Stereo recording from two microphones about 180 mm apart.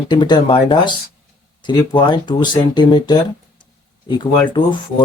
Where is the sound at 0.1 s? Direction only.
25° left (ahead or behind).